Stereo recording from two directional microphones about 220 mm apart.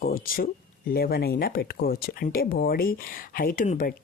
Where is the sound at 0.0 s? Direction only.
40° left (ahead or behind).